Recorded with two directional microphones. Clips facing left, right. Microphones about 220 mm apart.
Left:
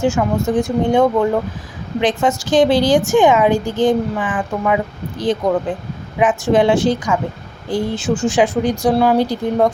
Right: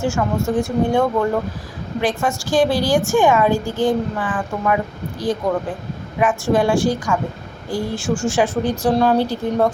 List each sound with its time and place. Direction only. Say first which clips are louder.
0.0 s a woman's voice: left 3 dB; 15° left (ahead or behind)
6.1 s a woman's voice: left 3 dB; 20° left (ahead or behind)